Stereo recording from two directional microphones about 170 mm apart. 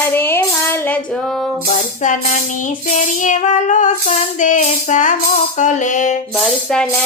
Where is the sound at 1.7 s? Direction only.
50° left (ahead or behind).